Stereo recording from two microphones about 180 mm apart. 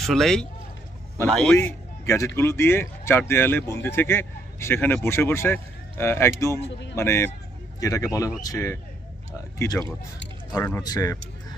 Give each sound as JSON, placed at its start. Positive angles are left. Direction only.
{"t": 0.0, "sound": "a man's voice", "side_deg": 0}